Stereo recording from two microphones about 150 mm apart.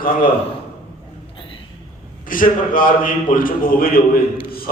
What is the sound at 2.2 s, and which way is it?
A man's voice, 65° left (ahead or behind).